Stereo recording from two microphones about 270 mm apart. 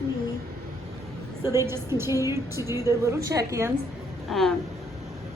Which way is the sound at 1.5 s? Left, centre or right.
Centre.